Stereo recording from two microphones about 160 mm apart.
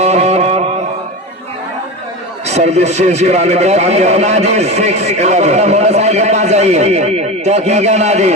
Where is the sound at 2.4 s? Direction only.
45° right (ahead or behind).